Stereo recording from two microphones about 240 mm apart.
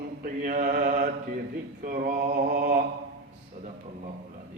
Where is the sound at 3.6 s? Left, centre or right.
Right.